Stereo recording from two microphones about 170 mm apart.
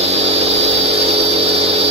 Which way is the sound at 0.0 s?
40° right (ahead or behind).